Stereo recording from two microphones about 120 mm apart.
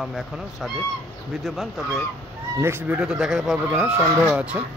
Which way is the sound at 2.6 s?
20° right (ahead or behind).